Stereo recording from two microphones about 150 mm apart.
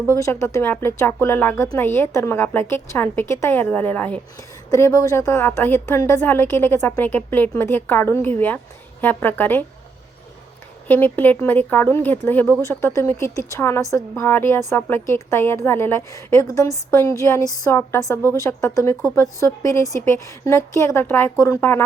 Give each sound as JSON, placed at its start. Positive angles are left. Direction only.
{"t": 0.0, "sound": "a woman's voice", "side_deg": 20}
{"t": 4.7, "sound": "a woman's voice", "side_deg": 20}
{"t": 10.8, "sound": "a woman's voice", "side_deg": 10}